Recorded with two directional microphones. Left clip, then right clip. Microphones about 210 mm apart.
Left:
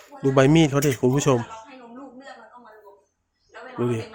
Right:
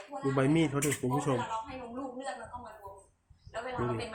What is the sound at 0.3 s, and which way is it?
Speech, 55° left (ahead or behind).